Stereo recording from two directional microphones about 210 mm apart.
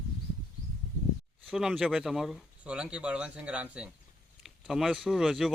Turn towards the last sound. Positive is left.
turn(degrees=0)  # may be behind; listen again after turning